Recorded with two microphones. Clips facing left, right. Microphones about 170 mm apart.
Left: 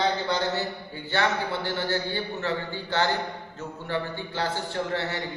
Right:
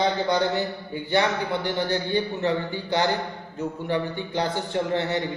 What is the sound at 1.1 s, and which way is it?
A man's voice, 15° right (ahead or behind).